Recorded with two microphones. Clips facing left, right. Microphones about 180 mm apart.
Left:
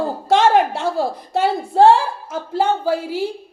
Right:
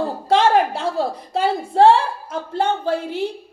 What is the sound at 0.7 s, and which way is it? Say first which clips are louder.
Speech: left 1 dB; 25° left (ahead or behind).